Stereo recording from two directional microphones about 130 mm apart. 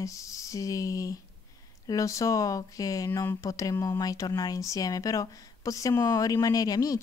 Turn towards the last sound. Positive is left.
turn(degrees=30)  # may be behind; listen again after turning